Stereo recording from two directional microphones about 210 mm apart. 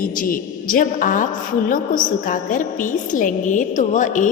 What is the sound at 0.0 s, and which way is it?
A woman's voice, 40° left (ahead or behind).